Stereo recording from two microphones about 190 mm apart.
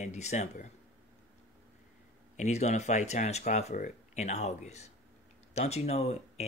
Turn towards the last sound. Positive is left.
turn(degrees=35)  # may be behind; listen again after turning